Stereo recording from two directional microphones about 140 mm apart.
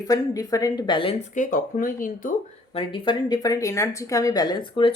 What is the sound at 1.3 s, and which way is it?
Speech, 70° left (ahead or behind).